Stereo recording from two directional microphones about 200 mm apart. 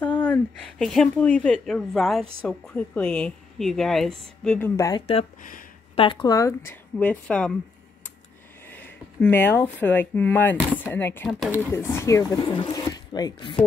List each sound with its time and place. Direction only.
0.0 s a woman's voice: 5° left (ahead or behind)
5.0 s speech: 30° left (ahead or behind); by 7.5 s 5° left (ahead or behind)
8.6 s speech: 10° left (ahead or behind)
11.2 s a woman's voice: centre (ahead or behind)
11.7 s speech: 15° left (ahead or behind)